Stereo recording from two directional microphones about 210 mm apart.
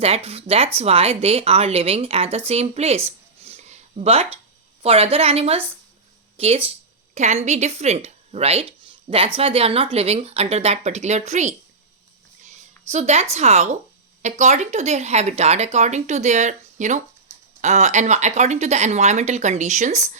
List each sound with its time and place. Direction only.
0.0 s a woman's voice: 30° right (ahead or behind)
3.1 s a sound: 30° right (ahead or behind)
4.8 s a woman's voice: 30° right (ahead or behind)
12.9 s speech: 30° right (ahead or behind)